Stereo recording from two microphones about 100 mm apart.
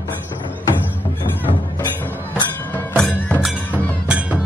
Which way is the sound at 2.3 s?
20° left (ahead or behind).